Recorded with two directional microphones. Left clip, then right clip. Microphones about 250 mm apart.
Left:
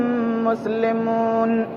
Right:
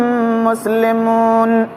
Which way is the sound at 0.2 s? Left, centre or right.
Right.